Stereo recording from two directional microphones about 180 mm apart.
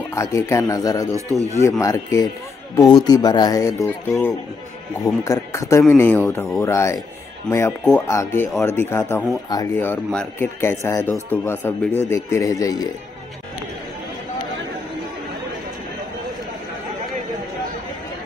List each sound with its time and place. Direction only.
0.1 s speech: 15° left (ahead or behind)
1.1 s speech: 15° right (ahead or behind)
1.6 s speech: 15° left (ahead or behind)